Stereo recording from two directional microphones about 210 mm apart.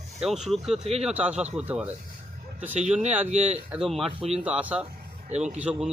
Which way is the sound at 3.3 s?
30° right (ahead or behind).